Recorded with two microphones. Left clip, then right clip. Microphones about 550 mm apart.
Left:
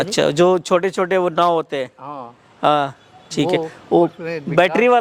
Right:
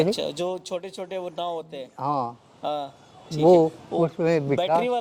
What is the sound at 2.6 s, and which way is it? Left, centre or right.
Speech, left.